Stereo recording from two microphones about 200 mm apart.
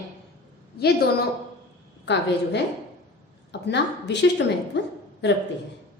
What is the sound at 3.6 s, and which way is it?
A woman's voice, 60° left (ahead or behind).